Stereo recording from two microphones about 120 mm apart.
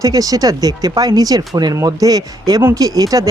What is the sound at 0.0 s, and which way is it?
Speech, 30° right (ahead or behind).